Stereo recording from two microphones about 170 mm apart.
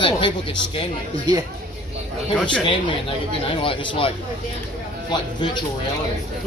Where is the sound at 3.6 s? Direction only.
30° left (ahead or behind).